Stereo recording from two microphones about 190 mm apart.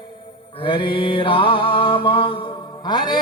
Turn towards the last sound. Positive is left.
turn(degrees=25)  # may be behind; listen again after turning